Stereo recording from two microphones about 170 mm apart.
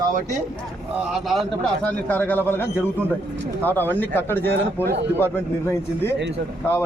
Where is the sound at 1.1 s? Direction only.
Centre (ahead or behind).